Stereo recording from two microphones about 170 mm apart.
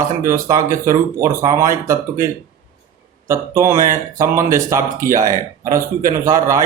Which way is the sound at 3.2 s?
15° right (ahead or behind).